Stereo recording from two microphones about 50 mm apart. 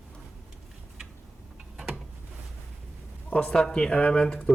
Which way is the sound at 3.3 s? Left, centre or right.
Centre.